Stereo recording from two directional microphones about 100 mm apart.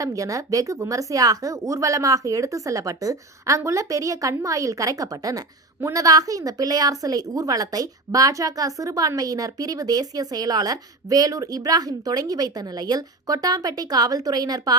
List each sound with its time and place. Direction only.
0.0 s a woman's voice: 35° right (ahead or behind)